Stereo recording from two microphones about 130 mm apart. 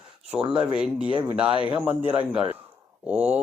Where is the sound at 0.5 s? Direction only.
10° right (ahead or behind).